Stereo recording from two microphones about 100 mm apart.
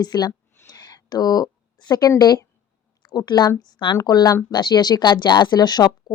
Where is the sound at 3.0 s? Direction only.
45° left (ahead or behind).